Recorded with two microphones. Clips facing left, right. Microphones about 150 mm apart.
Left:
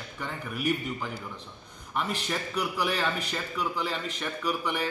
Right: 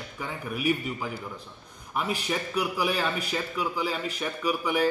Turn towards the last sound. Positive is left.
turn(degrees=-10)  # may be behind; listen again after turning